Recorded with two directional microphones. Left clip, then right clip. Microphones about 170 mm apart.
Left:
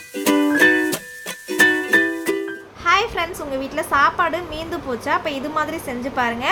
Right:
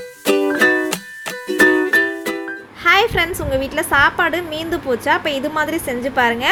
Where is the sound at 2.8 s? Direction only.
25° right (ahead or behind).